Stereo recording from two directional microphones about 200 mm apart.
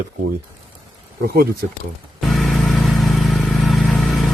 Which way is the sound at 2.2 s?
Centre (ahead or behind).